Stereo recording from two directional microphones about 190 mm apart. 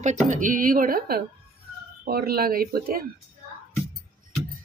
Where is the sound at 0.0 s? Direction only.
40° right (ahead or behind).